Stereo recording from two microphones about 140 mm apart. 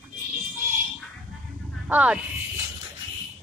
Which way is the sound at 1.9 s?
10° right (ahead or behind).